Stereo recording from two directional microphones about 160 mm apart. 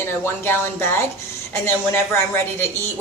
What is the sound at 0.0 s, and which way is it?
Speech, 15° left (ahead or behind).